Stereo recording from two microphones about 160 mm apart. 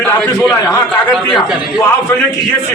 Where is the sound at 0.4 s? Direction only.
20° left (ahead or behind).